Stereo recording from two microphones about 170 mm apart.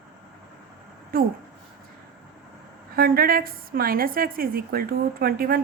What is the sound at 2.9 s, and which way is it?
A woman's voice, 60° right (ahead or behind).